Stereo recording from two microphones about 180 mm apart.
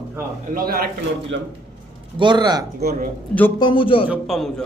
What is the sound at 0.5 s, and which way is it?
Speech, 55° right (ahead or behind).